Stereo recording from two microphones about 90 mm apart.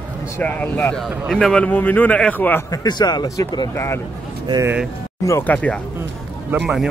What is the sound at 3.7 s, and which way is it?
Speech, 30° left (ahead or behind).